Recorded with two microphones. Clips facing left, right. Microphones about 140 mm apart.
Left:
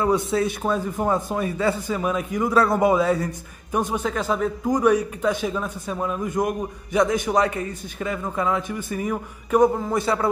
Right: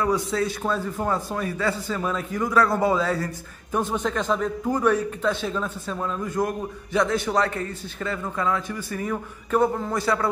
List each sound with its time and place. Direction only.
0.0 s a man's voice: 25° left (ahead or behind)